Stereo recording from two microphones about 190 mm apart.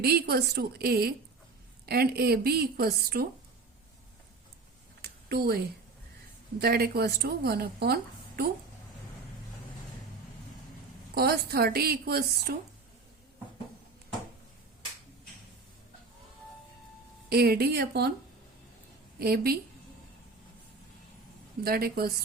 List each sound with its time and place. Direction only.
0.0 s a woman's voice: 55° right (ahead or behind)
5.0 s a sound: 60° right (ahead or behind)
6.6 s a woman's voice: 55° right (ahead or behind)
11.1 s a woman's voice: 55° right (ahead or behind)
17.2 s a woman's voice: 55° right (ahead or behind)
19.2 s a woman's voice: 55° right (ahead or behind)
21.6 s a woman's voice: 55° right (ahead or behind)